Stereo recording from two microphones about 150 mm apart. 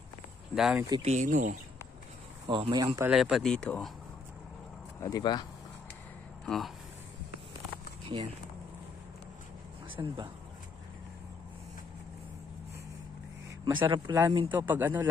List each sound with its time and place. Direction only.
0.6 s speech: 5° right (ahead or behind)
1.0 s speech: 55° right (ahead or behind)
2.4 s speech: 30° right (ahead or behind)
3.1 s speech: 5° right (ahead or behind)
5.0 s speech: 30° left (ahead or behind)
6.4 s speech: centre (ahead or behind)
8.0 s a sound: 35° right (ahead or behind)
10.0 s speech: 25° right (ahead or behind)
13.7 s speech: 30° right (ahead or behind)
14.7 s speech: 15° right (ahead or behind)